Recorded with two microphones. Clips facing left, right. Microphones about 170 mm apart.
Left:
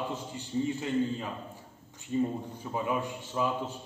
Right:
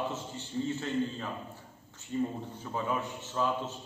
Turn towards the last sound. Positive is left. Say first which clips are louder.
# left 1 dB
turn(degrees=10)  # may be behind; listen again after turning